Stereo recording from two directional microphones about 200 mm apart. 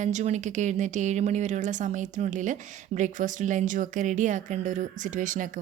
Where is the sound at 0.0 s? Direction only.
35° right (ahead or behind).